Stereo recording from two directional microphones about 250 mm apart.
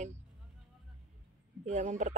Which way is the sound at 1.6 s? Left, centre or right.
Right.